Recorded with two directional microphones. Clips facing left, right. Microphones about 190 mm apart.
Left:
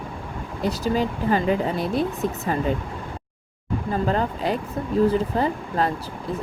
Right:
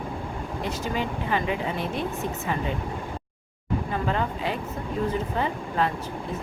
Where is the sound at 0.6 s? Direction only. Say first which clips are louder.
Left 7 dB; 35° left (ahead or behind).